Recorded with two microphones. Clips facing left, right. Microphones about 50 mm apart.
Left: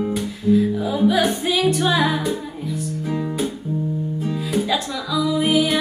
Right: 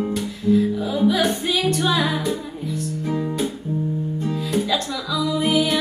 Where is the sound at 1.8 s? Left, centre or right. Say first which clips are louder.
Left 2 dB; left.